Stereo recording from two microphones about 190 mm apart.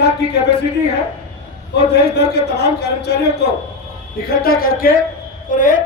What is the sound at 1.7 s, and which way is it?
A man's voice, 60° left (ahead or behind).